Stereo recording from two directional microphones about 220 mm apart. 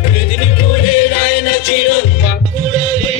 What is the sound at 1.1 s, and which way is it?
Music, 30° left (ahead or behind).